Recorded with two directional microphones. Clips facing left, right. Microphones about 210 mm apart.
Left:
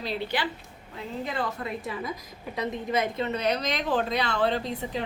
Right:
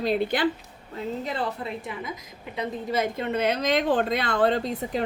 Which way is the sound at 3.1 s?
50° right (ahead or behind).